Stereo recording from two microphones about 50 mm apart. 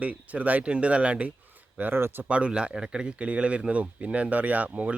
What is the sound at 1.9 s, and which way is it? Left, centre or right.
Speech, right.